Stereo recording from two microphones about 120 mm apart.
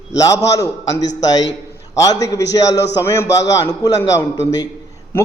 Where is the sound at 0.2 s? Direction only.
30° left (ahead or behind).